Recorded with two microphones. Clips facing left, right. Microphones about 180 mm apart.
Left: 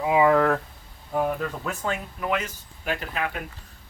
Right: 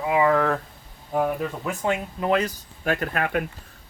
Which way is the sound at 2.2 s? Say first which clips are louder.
Right 5 dB; 35° right (ahead or behind).